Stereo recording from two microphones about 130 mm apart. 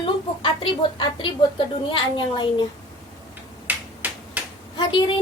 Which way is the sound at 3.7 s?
15° right (ahead or behind).